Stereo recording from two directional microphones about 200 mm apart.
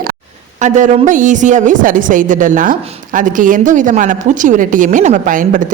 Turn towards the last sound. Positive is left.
turn(degrees=-40)  # may be behind; listen again after turning